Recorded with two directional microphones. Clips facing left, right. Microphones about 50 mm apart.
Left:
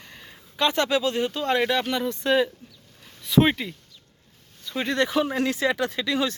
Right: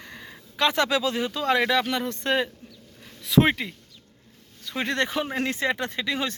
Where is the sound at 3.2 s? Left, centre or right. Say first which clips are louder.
Even; right.